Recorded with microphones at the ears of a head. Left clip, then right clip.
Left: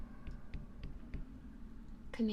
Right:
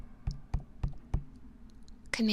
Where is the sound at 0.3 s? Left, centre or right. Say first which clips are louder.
Right 7 dB; right.